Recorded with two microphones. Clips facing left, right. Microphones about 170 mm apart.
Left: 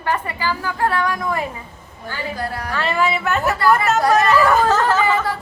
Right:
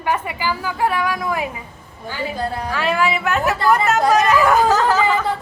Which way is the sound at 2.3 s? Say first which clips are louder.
Right 3 dB; 20° right (ahead or behind).